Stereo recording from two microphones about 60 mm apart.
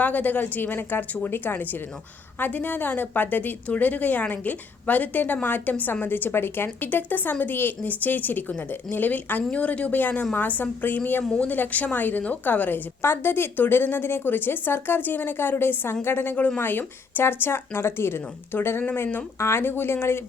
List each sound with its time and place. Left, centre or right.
0.0 s a woman's voice: left
11.2 s speech: centre
11.4 s a woman's voice: left
19.4 s a woman's voice: left